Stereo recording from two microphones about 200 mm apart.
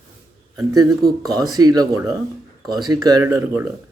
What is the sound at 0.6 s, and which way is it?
Speech, 20° right (ahead or behind).